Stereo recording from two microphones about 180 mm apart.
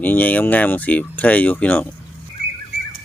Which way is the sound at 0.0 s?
10° left (ahead or behind).